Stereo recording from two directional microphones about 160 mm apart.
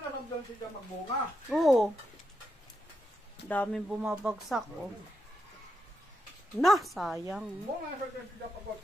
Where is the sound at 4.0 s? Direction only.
5° right (ahead or behind).